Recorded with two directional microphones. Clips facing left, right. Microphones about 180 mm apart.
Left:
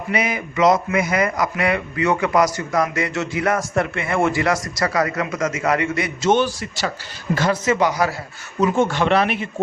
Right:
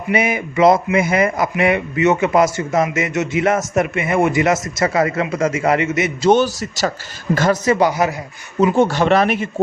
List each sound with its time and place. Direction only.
0.1 s a man's voice: 25° right (ahead or behind)
6.3 s speech: 40° right (ahead or behind)